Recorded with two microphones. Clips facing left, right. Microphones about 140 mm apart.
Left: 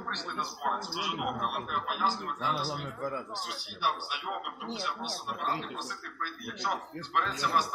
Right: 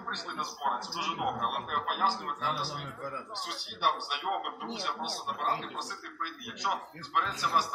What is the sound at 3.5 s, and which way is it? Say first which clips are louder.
A man's voice: right 3 dB; 60° right (ahead or behind).